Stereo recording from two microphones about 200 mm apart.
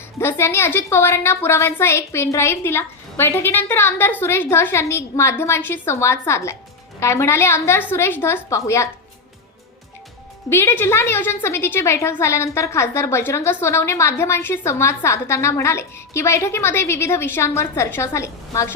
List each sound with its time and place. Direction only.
0.2 s a woman's voice: 10° left (ahead or behind)
10.5 s a woman's voice: 10° left (ahead or behind)